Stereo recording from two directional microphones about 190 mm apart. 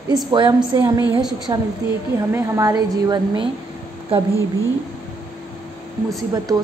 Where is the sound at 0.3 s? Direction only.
25° right (ahead or behind).